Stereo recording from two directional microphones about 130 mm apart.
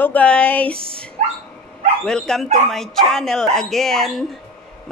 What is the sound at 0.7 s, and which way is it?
Speech, 45° right (ahead or behind).